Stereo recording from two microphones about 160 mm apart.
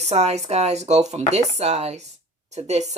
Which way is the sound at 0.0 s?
45° right (ahead or behind).